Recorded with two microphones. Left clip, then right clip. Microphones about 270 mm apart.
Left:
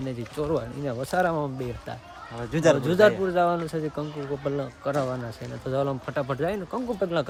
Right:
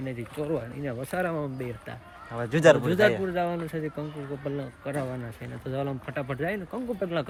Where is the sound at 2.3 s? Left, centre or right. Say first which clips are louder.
Right 2 dB; right.